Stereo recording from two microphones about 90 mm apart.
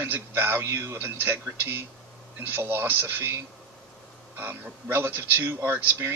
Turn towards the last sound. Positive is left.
turn(degrees=-20)  # may be behind; listen again after turning